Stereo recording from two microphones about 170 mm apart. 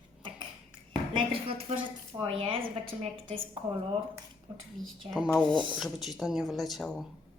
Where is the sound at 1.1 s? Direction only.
35° right (ahead or behind).